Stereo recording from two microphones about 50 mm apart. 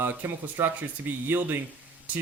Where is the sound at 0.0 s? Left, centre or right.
Right.